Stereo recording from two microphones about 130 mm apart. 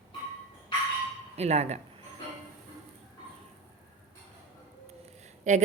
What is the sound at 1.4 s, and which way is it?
Speech, 55° right (ahead or behind).